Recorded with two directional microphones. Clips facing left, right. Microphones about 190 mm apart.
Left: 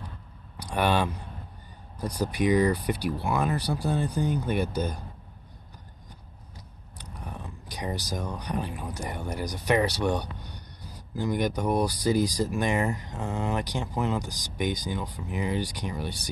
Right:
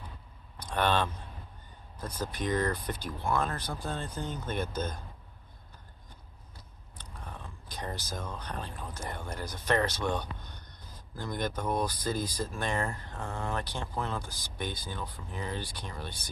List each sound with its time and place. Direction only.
0.6 s speech: 10° left (ahead or behind)
7.0 s speech: 15° left (ahead or behind)